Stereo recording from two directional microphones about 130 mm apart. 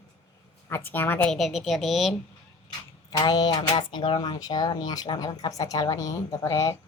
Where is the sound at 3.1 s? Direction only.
30° left (ahead or behind).